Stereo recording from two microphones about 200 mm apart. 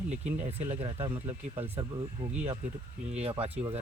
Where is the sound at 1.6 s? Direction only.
30° right (ahead or behind).